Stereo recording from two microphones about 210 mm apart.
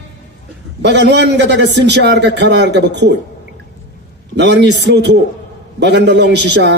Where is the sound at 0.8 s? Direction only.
55° right (ahead or behind).